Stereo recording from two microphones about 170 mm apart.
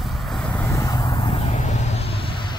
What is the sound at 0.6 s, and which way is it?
Vehicle, 15° left (ahead or behind).